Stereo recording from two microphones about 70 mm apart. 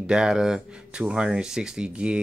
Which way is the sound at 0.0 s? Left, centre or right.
Centre.